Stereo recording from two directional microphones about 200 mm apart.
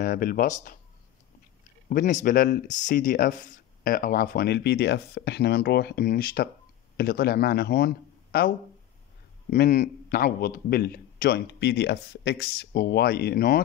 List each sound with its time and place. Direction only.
0.0 s a man's voice: 45° left (ahead or behind)
1.9 s a man's voice: 45° left (ahead or behind)